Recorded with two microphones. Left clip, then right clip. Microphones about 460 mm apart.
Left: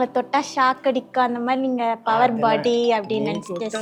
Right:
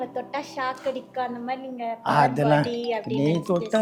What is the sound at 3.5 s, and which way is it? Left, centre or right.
Speech, right.